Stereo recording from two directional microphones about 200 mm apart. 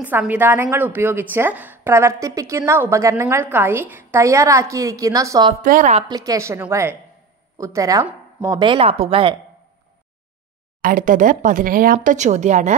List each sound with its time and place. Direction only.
0.0 s speech: 10° right (ahead or behind)
5.5 s speech: 40° right (ahead or behind)
6.0 s speech: 20° right (ahead or behind)
10.8 s speech: 45° right (ahead or behind)